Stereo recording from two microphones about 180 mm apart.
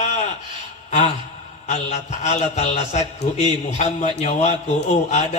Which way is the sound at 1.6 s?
40° left (ahead or behind).